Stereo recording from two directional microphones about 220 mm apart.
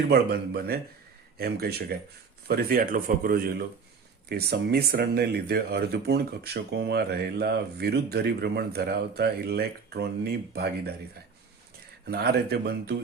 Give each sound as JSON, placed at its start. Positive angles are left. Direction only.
{"t": 0.1, "sound": "speech", "side_deg": -45}
{"t": 12.0, "sound": "speech", "side_deg": -45}